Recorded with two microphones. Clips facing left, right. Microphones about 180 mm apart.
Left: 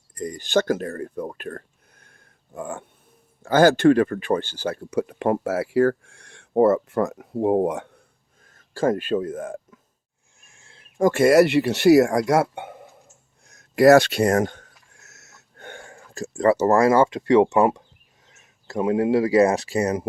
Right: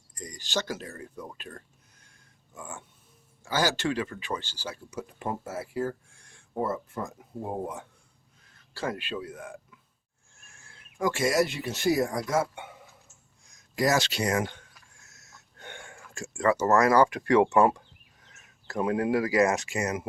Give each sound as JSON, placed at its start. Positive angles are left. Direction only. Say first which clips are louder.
{"t": 0.1, "sound": "speech", "louder": "left 11 dB", "side_deg": 55}
{"t": 8.4, "sound": "speech", "louder": "left 11 dB", "side_deg": 45}
{"t": 10.4, "sound": "a sound", "louder": "left 1 dB", "side_deg": 20}
{"t": 10.9, "sound": "speech", "louder": "left 10 dB", "side_deg": 50}
{"t": 14.9, "sound": "a sound", "louder": "left 4 dB", "side_deg": 70}
{"t": 15.6, "sound": "speech", "louder": "left 5 dB", "side_deg": 40}